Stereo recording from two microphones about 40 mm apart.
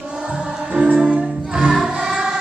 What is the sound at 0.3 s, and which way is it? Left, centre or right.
Music, right.